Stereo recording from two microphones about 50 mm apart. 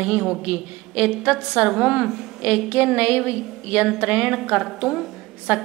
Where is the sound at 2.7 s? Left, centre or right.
Right.